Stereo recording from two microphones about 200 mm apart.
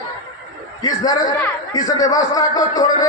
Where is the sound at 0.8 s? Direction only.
20° left (ahead or behind).